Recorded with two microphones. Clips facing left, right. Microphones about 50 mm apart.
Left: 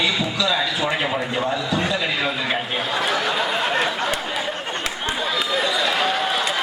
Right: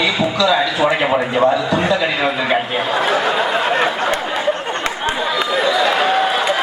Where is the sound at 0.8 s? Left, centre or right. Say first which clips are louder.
Right 7 dB; right.